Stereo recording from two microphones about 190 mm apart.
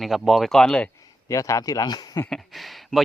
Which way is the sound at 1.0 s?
15° left (ahead or behind).